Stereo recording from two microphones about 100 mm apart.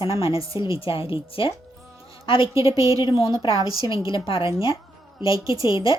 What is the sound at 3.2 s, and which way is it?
Speech, 45° left (ahead or behind).